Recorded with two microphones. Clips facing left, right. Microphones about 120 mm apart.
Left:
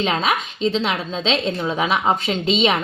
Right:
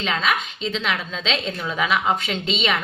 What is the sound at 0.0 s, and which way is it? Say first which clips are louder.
A woman's voice: left 3 dB; 40° left (ahead or behind).